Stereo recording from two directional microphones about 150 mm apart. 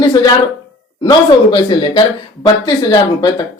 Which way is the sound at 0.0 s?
30° left (ahead or behind).